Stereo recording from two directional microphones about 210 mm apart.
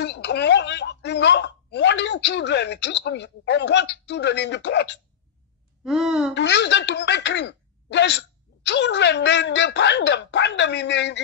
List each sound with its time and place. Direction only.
0.0 s speech: 55° left (ahead or behind)
5.9 s speech: centre (ahead or behind)
6.3 s speech: 55° left (ahead or behind)